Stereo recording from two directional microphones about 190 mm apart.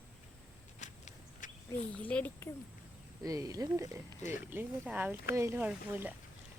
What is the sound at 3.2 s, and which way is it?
Speech, 20° right (ahead or behind).